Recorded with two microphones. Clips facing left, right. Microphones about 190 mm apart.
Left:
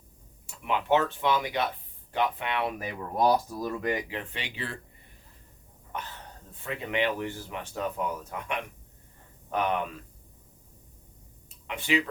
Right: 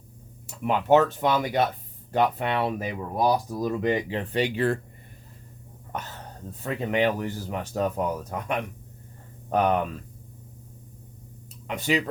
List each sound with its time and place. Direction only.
0.4 s speech: 40° right (ahead or behind)
2.7 s speech: 20° right (ahead or behind)
4.2 s speech: 40° right (ahead or behind)
6.5 s speech: 40° right (ahead or behind)
11.7 s speech: 40° right (ahead or behind)